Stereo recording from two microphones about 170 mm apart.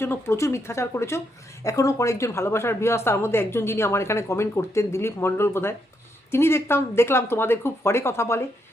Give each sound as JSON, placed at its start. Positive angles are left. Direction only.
{"t": 0.0, "sound": "speech", "side_deg": 15}